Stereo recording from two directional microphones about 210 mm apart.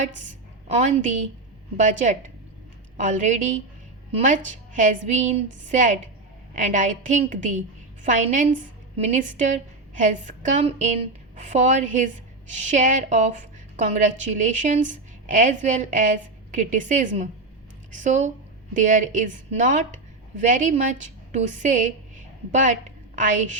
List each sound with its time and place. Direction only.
0.2 s a woman's voice: 35° right (ahead or behind)